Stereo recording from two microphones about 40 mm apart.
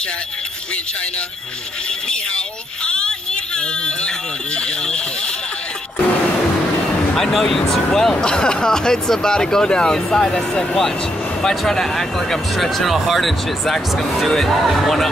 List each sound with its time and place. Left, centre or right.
2.0 s speech: left
7.2 s speech: centre